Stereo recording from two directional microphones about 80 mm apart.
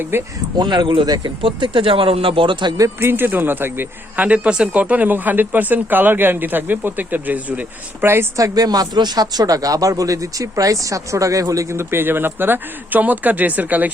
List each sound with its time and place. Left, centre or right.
0.1 s a man's voice: right
0.5 s speech: right
3.0 s a man's voice: right
8.4 s speech: right